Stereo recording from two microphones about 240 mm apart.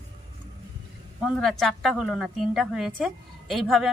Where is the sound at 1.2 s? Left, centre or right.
Centre.